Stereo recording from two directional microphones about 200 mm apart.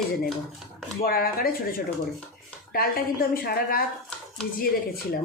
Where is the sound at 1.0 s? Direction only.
45° left (ahead or behind).